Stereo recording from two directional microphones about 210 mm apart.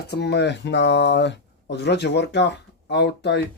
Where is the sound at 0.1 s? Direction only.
50° left (ahead or behind).